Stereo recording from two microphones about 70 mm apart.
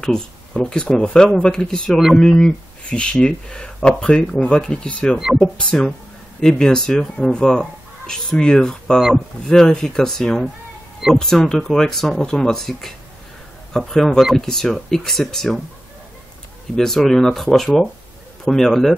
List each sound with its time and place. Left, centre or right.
0.0 s speech: centre
16.7 s speech: centre